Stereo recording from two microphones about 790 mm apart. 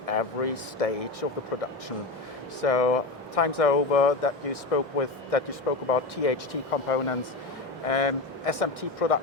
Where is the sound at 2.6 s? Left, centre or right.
Left.